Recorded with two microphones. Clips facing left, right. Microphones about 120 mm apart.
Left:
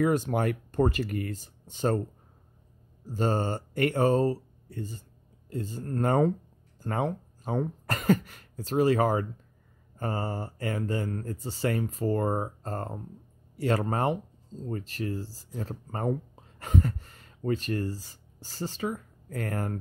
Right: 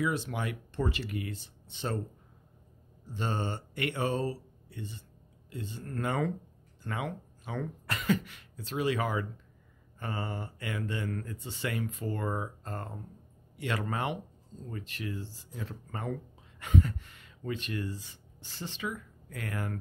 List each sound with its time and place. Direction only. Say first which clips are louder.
0.0 s speech: left 7 dB; 45° left (ahead or behind)
3.1 s speech: left 7 dB; 40° left (ahead or behind)